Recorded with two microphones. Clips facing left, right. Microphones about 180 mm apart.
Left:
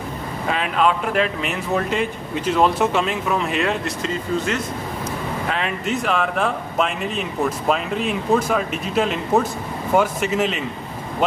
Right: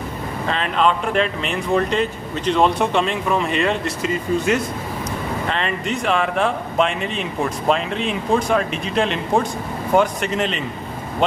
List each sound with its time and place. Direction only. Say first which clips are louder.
0.5 s speech: even; 5° left (ahead or behind)
5.5 s speech: left 1 dB; 5° left (ahead or behind)